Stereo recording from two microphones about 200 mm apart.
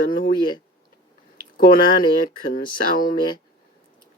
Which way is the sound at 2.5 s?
45° left (ahead or behind).